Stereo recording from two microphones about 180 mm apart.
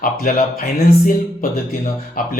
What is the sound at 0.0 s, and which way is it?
Speech, 55° left (ahead or behind).